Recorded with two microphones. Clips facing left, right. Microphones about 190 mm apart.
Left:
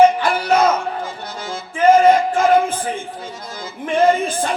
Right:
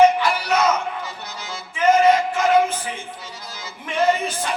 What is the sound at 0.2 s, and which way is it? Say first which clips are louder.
Music: left 4 dB; 50° left (ahead or behind).